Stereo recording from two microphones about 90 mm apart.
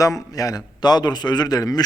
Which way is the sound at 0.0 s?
40° left (ahead or behind).